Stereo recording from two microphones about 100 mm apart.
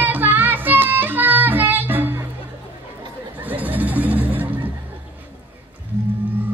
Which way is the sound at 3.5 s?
15° right (ahead or behind).